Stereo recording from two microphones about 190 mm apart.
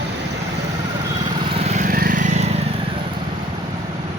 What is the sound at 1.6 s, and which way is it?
Vehicle, 40° right (ahead or behind).